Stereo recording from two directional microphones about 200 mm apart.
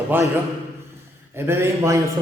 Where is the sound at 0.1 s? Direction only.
10° right (ahead or behind).